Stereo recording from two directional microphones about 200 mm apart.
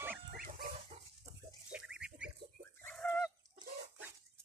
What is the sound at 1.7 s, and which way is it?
Pig, 5° right (ahead or behind).